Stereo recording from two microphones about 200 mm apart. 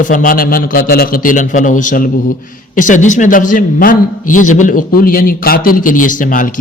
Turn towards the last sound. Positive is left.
turn(degrees=40)  # may be behind; listen again after turning